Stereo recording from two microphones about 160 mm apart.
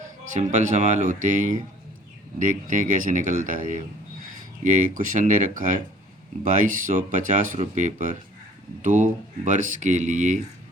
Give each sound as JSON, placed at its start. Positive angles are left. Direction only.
{"t": 0.3, "sound": "speech", "side_deg": -50}